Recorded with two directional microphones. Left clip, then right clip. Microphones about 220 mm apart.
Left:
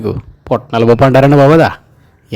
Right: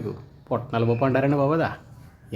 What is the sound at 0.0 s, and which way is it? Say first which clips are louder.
Speech: left 15 dB; 45° left (ahead or behind).